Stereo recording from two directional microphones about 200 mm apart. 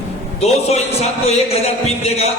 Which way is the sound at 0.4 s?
30° left (ahead or behind).